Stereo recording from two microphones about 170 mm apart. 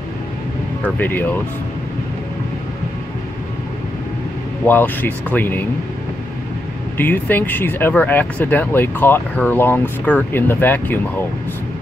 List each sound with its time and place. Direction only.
0.8 s speech: 10° left (ahead or behind)
4.6 s speech: 10° left (ahead or behind)
7.0 s speech: 10° left (ahead or behind)